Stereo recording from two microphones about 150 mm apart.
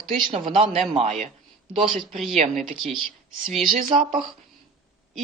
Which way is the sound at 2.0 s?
Centre (ahead or behind).